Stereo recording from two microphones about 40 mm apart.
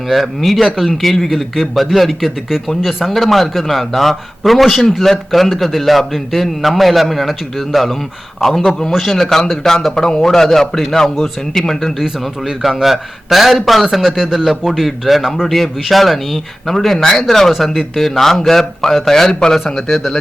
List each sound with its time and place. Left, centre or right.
0.1 s a man's voice: centre
19.5 s speech: centre